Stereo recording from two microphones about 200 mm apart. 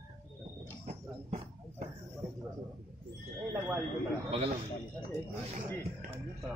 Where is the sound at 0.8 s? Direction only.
30° right (ahead or behind).